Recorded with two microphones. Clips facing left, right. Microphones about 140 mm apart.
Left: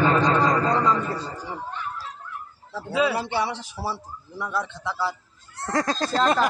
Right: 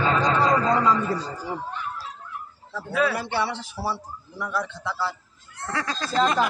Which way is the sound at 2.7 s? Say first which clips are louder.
Left 1 dB; 20° left (ahead or behind).